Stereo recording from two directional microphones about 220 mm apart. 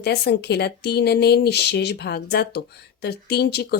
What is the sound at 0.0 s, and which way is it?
Speech, 50° left (ahead or behind).